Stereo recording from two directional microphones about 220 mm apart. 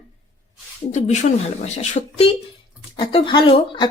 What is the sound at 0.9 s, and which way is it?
Speech, 30° left (ahead or behind).